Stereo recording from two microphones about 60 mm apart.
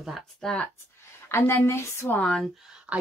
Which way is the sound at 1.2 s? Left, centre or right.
Left.